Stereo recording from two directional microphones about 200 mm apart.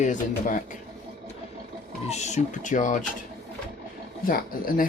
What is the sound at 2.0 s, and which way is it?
Speech, 35° left (ahead or behind).